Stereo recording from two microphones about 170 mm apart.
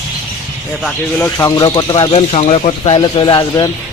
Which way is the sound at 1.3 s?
20° left (ahead or behind).